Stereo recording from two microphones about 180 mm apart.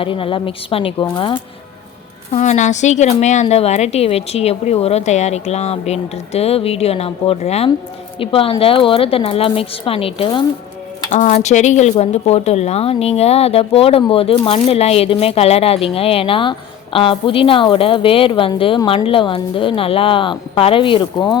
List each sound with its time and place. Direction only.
0.0 s a woman's voice: 30° left (ahead or behind)
2.3 s speech: 40° left (ahead or behind)